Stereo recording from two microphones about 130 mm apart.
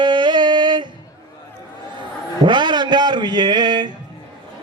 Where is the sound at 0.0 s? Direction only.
35° right (ahead or behind).